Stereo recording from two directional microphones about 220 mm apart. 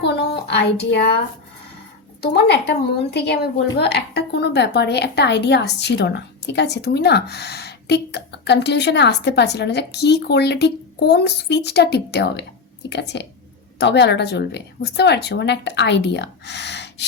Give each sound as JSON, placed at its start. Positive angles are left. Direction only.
{"t": 0.0, "sound": "a woman's voice", "side_deg": 50}
{"t": 2.2, "sound": "speech", "side_deg": 50}